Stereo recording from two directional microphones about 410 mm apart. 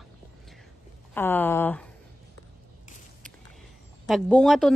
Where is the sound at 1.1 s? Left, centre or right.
Centre.